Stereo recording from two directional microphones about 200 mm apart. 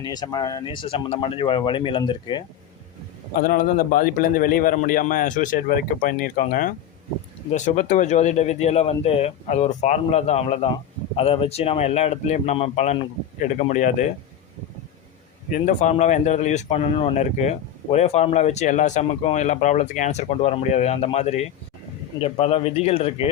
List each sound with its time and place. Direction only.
0.0 s speech: 20° left (ahead or behind)
3.4 s a man's voice: 45° left (ahead or behind)
15.5 s speech: 40° left (ahead or behind)